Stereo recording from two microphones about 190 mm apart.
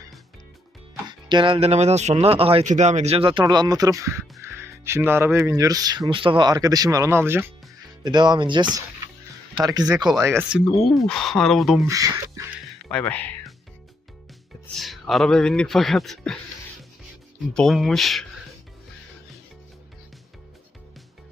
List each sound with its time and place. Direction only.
1.0 s speech: 25° right (ahead or behind)
8.0 s speech: 20° right (ahead or behind)
10.5 s speech: 5° right (ahead or behind)
11.9 s speech: 20° right (ahead or behind)
12.9 s speech: 5° left (ahead or behind)
14.8 s speech: centre (ahead or behind)
17.5 s speech: centre (ahead or behind)